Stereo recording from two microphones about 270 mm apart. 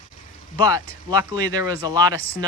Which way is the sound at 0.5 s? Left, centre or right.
Centre.